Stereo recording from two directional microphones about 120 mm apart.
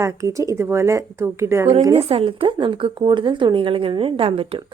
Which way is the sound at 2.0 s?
55° right (ahead or behind).